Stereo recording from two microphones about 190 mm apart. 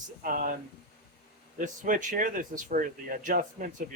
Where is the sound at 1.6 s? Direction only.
45° right (ahead or behind).